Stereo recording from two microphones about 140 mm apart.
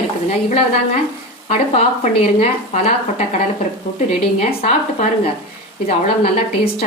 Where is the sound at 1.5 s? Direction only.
50° left (ahead or behind).